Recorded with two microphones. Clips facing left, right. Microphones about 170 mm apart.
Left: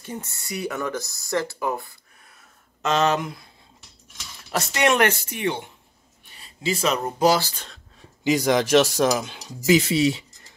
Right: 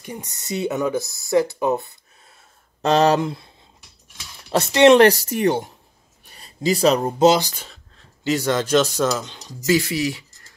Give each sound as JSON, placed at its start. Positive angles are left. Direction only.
{"t": 0.0, "sound": "speech", "side_deg": -15}
{"t": 4.5, "sound": "speech", "side_deg": -25}
{"t": 8.0, "sound": "speech", "side_deg": 15}